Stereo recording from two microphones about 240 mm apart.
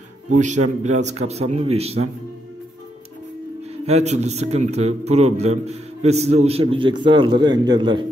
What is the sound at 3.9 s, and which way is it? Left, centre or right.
A man's voice, right.